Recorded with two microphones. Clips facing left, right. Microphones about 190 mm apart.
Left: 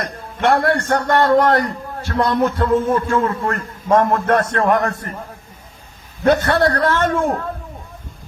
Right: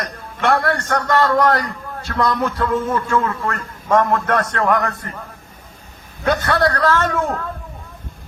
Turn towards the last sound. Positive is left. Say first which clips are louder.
# left 1 dB
turn(degrees=30)  # may be behind; listen again after turning